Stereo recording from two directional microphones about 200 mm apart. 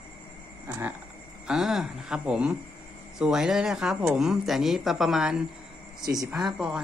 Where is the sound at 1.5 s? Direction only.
Centre (ahead or behind).